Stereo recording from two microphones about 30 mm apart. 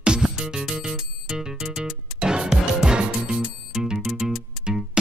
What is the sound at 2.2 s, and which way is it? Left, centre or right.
Music, right.